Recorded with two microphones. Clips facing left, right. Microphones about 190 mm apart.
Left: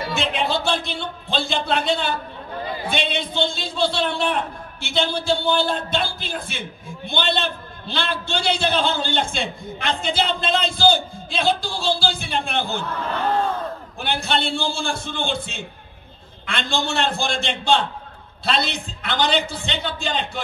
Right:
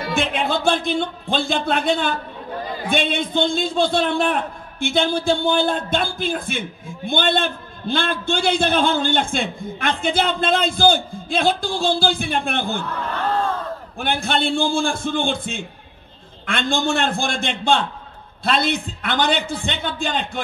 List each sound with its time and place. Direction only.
0.1 s a man's voice: 50° right (ahead or behind)
13.9 s a man's voice: 50° right (ahead or behind)